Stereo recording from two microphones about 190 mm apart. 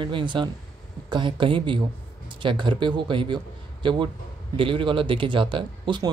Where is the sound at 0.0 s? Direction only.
25° right (ahead or behind).